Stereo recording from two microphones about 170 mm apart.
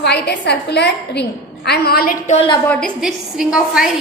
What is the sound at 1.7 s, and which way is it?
Speech, 65° left (ahead or behind).